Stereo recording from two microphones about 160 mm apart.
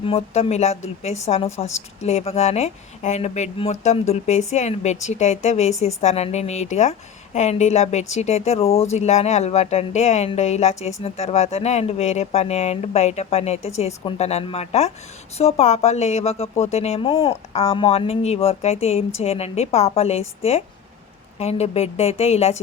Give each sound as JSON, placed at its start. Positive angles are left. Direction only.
{"t": 0.0, "sound": "a woman's voice", "side_deg": 35}